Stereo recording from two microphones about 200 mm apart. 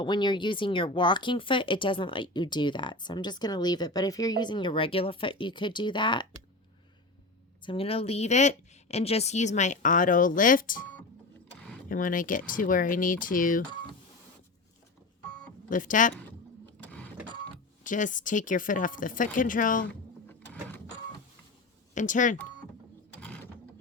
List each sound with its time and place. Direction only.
0.0 s speech: 20° left (ahead or behind)
7.6 s speech: 25° left (ahead or behind); by 10.8 s 45° left (ahead or behind)
11.9 s speech: 40° left (ahead or behind)
15.7 s speech: 40° left (ahead or behind)
16.8 s printer: 10° left (ahead or behind)
17.8 s speech: 40° left (ahead or behind)
19.9 s sewing machine: 10° left (ahead or behind)
21.9 s speech: 40° left (ahead or behind)
23.2 s mechanisms: 5° left (ahead or behind)